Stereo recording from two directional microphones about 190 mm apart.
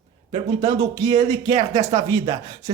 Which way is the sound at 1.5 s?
35° right (ahead or behind).